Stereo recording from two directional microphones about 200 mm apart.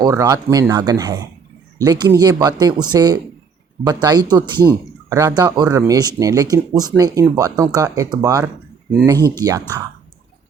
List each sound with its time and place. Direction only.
0.0 s speech: 15° right (ahead or behind)